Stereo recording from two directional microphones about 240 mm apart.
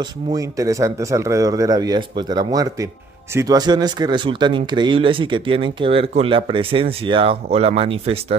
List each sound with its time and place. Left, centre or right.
0.0 s speech: centre